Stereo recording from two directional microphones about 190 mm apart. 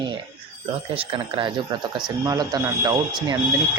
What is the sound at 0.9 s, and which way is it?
Speech, 25° right (ahead or behind).